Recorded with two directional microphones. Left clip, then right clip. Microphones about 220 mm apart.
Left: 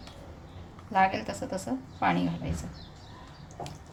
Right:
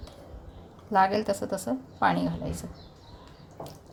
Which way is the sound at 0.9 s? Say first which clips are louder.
Right 3 dB; 30° right (ahead or behind).